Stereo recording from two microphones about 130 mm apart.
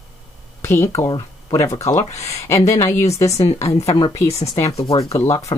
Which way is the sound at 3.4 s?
55° left (ahead or behind).